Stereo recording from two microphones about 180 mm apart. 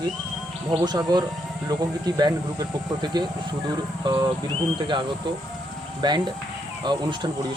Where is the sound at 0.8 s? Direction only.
20° right (ahead or behind).